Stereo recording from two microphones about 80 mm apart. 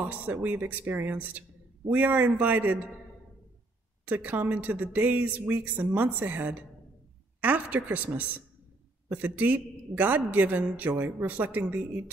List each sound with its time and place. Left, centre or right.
0.0 s a woman's voice: right
4.0 s a woman's voice: right